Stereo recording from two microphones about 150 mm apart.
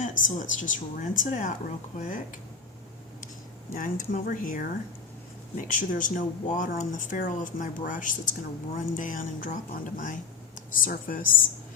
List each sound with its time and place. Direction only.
0.0 s speech: 55° left (ahead or behind)
3.8 s speech: 65° left (ahead or behind)